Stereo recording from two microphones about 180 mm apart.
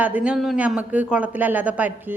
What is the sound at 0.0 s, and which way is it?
Speech, 5° right (ahead or behind).